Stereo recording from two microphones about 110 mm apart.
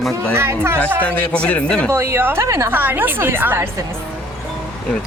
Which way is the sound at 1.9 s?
25° right (ahead or behind).